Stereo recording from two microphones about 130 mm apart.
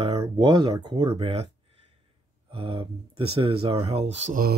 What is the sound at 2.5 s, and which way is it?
Speech, 40° right (ahead or behind).